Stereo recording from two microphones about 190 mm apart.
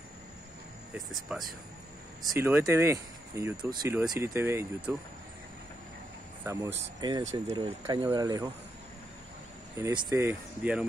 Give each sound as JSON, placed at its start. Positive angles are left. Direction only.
{"t": 0.9, "sound": "speech", "side_deg": -5}
{"t": 6.4, "sound": "speech", "side_deg": -15}
{"t": 9.8, "sound": "speech", "side_deg": -15}